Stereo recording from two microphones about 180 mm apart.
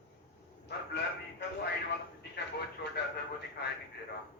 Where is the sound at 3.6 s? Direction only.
70° left (ahead or behind).